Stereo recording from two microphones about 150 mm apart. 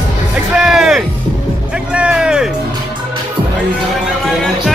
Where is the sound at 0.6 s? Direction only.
5° right (ahead or behind).